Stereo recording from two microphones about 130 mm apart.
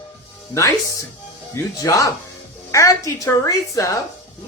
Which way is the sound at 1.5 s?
25° left (ahead or behind).